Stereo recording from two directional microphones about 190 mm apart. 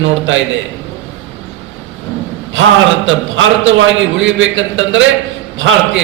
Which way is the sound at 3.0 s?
90° right.